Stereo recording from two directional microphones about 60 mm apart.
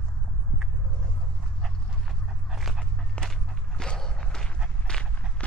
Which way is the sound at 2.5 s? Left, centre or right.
Centre.